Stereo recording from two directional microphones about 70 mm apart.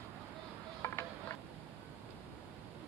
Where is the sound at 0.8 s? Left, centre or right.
Left.